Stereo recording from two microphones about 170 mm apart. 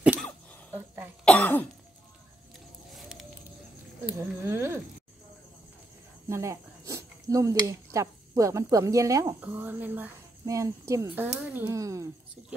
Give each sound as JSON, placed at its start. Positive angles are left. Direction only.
{"t": 0.0, "sound": "cough", "side_deg": -5}
{"t": 1.2, "sound": "cough", "side_deg": 10}
{"t": 2.9, "sound": "a sound", "side_deg": 0}
{"t": 4.0, "sound": "speech", "side_deg": -15}
{"t": 6.2, "sound": "speech", "side_deg": -15}